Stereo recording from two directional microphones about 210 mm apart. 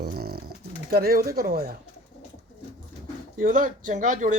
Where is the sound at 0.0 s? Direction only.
45° right (ahead or behind).